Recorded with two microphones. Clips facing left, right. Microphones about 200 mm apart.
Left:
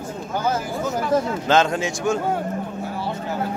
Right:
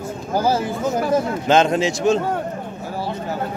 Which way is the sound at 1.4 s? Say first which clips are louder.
Right 3 dB; 20° right (ahead or behind).